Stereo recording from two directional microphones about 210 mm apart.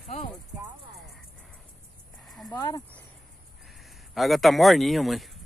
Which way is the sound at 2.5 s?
15° left (ahead or behind).